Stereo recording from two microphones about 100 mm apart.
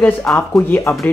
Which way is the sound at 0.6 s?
25° left (ahead or behind).